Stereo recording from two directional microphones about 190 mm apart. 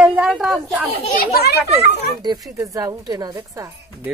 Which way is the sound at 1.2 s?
55° left (ahead or behind).